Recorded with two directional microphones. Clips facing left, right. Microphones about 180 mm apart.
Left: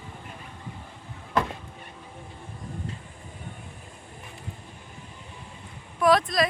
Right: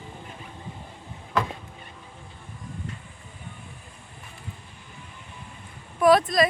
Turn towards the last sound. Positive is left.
turn(degrees=0)  # may be behind; listen again after turning